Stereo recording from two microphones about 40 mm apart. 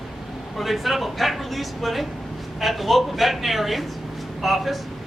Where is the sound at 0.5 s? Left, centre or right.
Centre.